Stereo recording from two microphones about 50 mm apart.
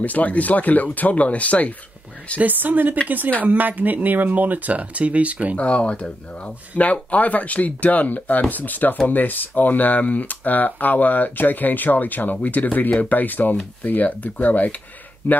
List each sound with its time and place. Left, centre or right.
0.0 s speech: left
2.3 s speech: right
5.6 s speech: left